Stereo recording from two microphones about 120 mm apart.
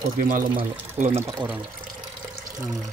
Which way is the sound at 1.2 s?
30° right (ahead or behind).